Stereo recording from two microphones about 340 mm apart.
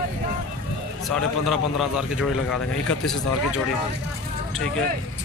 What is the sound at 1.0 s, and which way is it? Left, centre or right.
Speech, centre.